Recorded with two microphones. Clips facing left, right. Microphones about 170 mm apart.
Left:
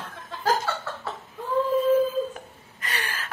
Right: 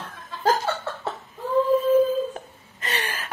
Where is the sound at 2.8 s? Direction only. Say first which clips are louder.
Right 3 dB; 25° right (ahead or behind).